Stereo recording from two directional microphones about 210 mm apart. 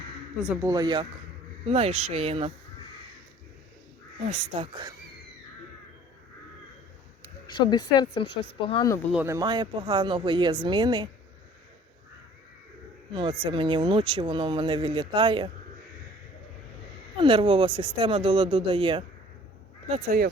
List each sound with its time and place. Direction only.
0.4 s speech: 10° right (ahead or behind); by 2.5 s 30° right (ahead or behind)
4.2 s speech: 30° right (ahead or behind)
7.4 s speech: 20° left (ahead or behind)
9.1 s speech: 15° right (ahead or behind)
13.1 s speech: 25° right (ahead or behind)
17.2 s speech: 25° right (ahead or behind)
20.1 s speech: 45° right (ahead or behind)